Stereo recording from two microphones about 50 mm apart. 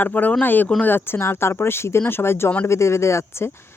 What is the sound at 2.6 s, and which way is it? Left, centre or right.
Speech, left.